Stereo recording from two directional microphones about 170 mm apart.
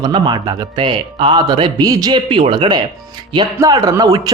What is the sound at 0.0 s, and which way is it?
Speech, 25° right (ahead or behind).